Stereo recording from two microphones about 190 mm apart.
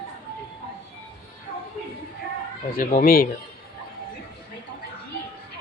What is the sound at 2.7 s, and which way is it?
Speech, 50° left (ahead or behind).